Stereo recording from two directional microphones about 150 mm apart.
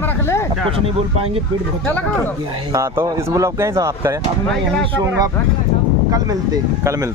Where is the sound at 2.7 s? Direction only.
20° right (ahead or behind).